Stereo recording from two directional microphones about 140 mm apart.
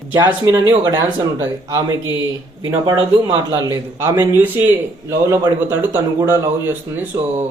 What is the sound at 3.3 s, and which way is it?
Speech, 30° right (ahead or behind).